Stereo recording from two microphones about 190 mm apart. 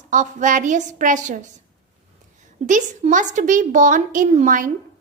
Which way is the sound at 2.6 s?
40° right (ahead or behind).